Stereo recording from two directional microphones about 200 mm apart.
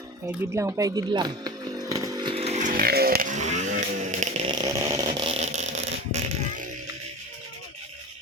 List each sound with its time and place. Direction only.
0.3 s chainsaw: 15° right (ahead or behind); by 4.5 s 35° right (ahead or behind)
4.5 s vehicle: 15° right (ahead or behind); by 5.7 s 35° right (ahead or behind)